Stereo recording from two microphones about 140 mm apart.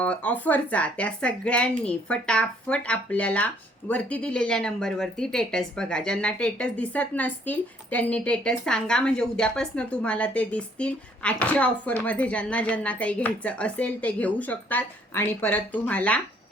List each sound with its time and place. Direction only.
0.0 s speech: 10° left (ahead or behind)